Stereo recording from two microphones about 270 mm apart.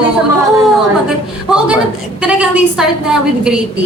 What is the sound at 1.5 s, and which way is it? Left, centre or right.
A woman's voice, centre.